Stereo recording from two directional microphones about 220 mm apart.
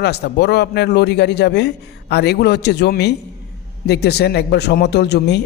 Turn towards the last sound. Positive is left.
turn(degrees=50)  # may be behind; listen again after turning